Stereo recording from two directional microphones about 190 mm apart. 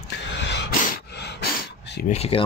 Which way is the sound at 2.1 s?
30° left (ahead or behind).